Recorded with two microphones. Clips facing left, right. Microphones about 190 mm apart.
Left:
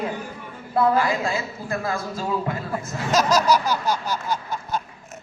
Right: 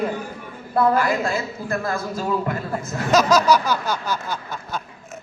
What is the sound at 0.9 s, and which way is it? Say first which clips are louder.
Speech: right 1 dB; 45° right (ahead or behind).